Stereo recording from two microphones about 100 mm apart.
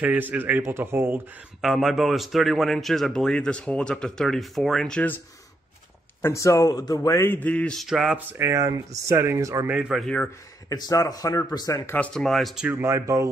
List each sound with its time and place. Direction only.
0.0 s speech: 15° right (ahead or behind)
1.6 s a man's voice: centre (ahead or behind)
6.2 s speech: 30° left (ahead or behind)
7.2 s a man's voice: 20° left (ahead or behind)
7.7 s a man's voice: centre (ahead or behind)
8.3 s speech: 30° right (ahead or behind)
9.7 s speech: 10° right (ahead or behind)
10.0 s a man's voice: 10° left (ahead or behind)
10.7 s speech: 35° left (ahead or behind)
12.1 s a man's voice: 5° left (ahead or behind)
12.8 s speech: 30° right (ahead or behind)